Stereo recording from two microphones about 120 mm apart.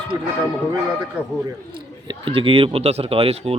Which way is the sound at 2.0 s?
45° right (ahead or behind).